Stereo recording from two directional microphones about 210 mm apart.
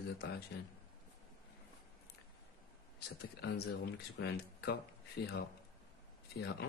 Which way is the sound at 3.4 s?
50° left (ahead or behind).